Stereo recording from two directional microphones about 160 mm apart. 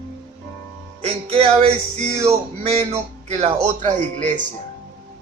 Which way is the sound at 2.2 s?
40° right (ahead or behind).